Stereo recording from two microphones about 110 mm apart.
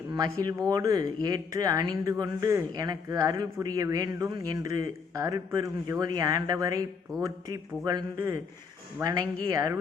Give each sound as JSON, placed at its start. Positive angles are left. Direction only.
{"t": 0.1, "sound": "speech", "side_deg": -35}
{"t": 9.0, "sound": "speech", "side_deg": -30}